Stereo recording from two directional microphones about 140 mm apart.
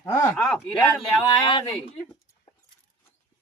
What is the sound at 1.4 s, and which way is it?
Speech, 30° left (ahead or behind).